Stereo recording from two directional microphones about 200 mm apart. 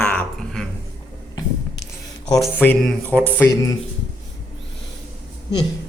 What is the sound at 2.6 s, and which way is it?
Speech, 5° left (ahead or behind).